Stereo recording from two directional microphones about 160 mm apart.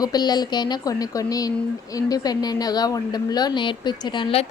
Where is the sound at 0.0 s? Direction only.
25° left (ahead or behind).